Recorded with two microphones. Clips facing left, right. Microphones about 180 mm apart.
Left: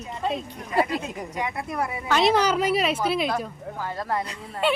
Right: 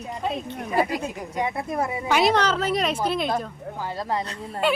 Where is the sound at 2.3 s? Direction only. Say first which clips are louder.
Left 1 dB; 10° left (ahead or behind).